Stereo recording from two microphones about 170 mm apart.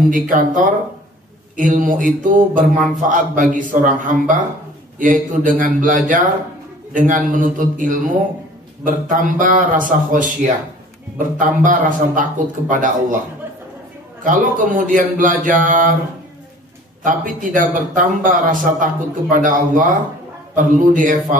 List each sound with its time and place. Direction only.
0.1 s a man's voice: 50° right (ahead or behind)
11.3 s a man's voice: 50° right (ahead or behind)
14.2 s a man's voice: 50° right (ahead or behind)
17.0 s a man's voice: 50° right (ahead or behind)